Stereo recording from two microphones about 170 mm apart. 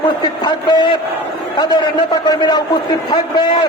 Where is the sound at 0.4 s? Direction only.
25° left (ahead or behind).